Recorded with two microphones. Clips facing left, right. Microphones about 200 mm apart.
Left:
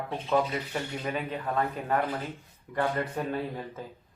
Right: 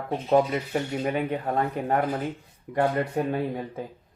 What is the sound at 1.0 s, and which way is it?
Speech, 55° right (ahead or behind).